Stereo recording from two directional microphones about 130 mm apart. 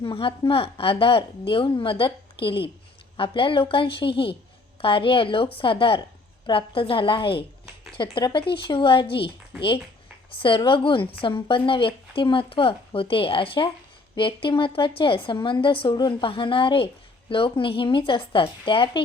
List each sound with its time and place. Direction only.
0.0 s a woman's voice: 45° left (ahead or behind)